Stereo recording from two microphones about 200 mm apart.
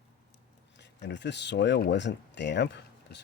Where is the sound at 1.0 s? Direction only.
60° left (ahead or behind).